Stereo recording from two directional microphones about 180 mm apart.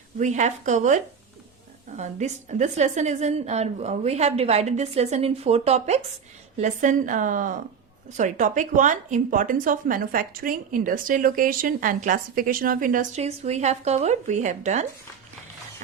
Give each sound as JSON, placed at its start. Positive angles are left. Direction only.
{"t": 0.2, "sound": "speech", "side_deg": -40}
{"t": 2.0, "sound": "a woman's voice", "side_deg": -40}